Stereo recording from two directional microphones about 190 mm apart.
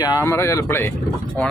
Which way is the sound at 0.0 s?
20° left (ahead or behind).